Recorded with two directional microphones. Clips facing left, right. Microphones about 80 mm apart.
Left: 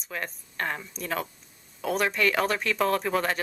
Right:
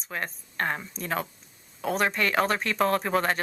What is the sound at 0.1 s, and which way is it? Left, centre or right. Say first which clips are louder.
Speech: right 1 dB; right.